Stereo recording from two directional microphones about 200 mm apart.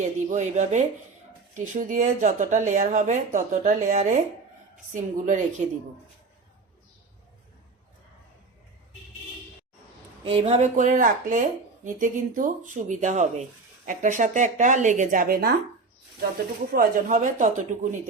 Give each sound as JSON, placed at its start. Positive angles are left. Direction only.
{"t": 0.0, "sound": "speech", "side_deg": -35}
{"t": 10.2, "sound": "speech", "side_deg": -30}
{"t": 16.7, "sound": "speech", "side_deg": -40}